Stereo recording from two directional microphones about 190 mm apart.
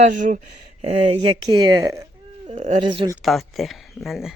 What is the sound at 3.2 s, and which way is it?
Speech, centre (ahead or behind).